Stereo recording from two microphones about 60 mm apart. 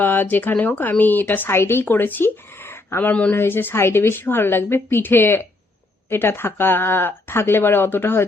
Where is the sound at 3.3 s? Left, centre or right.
Left.